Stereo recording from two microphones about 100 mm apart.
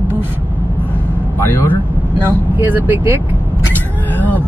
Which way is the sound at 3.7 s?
15° left (ahead or behind).